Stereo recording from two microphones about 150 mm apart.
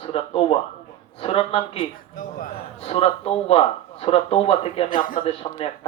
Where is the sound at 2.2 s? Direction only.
70° left (ahead or behind).